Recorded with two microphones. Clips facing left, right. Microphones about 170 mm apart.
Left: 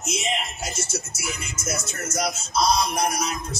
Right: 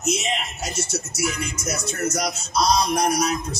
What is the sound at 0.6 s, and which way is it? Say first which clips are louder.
Speech: right 3 dB; 65° right (ahead or behind).